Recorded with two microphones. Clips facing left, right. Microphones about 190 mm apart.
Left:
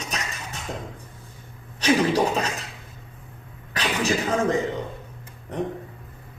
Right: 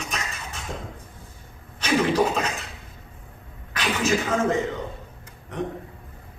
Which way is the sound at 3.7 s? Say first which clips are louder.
Right 1 dB; 35° left (ahead or behind).